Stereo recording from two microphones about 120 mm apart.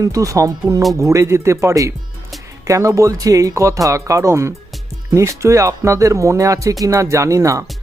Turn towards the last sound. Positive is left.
turn(degrees=-25)  # may be behind; listen again after turning